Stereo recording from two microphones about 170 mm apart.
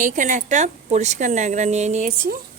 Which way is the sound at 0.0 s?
50° right (ahead or behind).